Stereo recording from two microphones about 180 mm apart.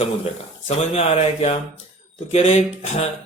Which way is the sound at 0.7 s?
35° left (ahead or behind).